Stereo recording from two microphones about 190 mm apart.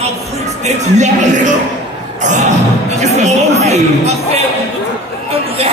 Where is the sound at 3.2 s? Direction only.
35° right (ahead or behind).